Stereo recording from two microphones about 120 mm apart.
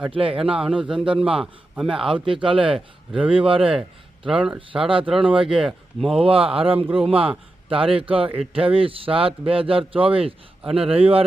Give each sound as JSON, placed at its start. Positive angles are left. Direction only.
{"t": 0.1, "sound": "a man's voice", "side_deg": -50}
{"t": 0.5, "sound": "speech", "side_deg": -10}
{"t": 1.0, "sound": "a man's voice", "side_deg": -50}
{"t": 1.7, "sound": "speech", "side_deg": -5}
{"t": 2.1, "sound": "a man's voice", "side_deg": -45}
{"t": 2.7, "sound": "speech", "side_deg": -10}
{"t": 3.3, "sound": "a man's voice", "side_deg": -50}
{"t": 4.3, "sound": "speech", "side_deg": -5}
{"t": 5.3, "sound": "a man's voice", "side_deg": -45}
{"t": 5.5, "sound": "speech", "side_deg": 0}
{"t": 6.1, "sound": "a man's voice", "side_deg": -50}